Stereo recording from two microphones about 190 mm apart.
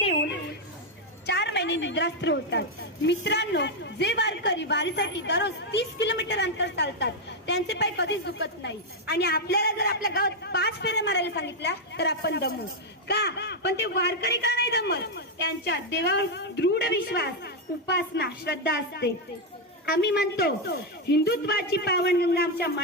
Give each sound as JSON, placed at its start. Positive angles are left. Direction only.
{"t": 1.3, "sound": "a woman's voice", "side_deg": 65}